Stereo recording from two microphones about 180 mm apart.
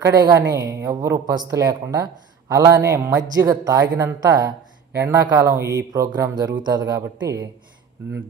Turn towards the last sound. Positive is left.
turn(degrees=-20)  # may be behind; listen again after turning